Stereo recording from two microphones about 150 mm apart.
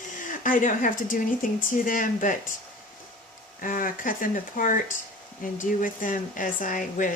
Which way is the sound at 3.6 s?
65° left (ahead or behind).